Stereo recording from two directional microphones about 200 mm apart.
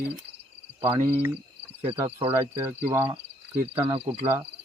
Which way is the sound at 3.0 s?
30° right (ahead or behind).